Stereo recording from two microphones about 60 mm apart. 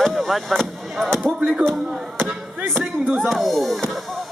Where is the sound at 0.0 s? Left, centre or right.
Centre.